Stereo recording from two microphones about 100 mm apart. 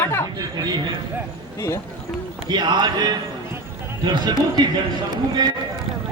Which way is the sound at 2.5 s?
50° right (ahead or behind).